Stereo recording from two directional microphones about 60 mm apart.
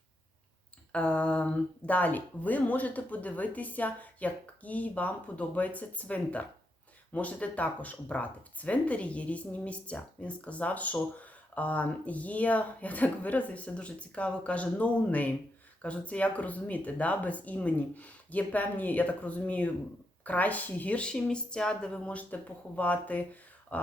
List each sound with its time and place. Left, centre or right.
0.9 s speech: centre